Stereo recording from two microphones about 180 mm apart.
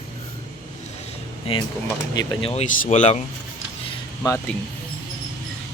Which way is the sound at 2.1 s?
35° left (ahead or behind).